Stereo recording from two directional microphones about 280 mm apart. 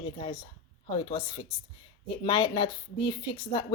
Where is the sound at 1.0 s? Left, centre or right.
Centre.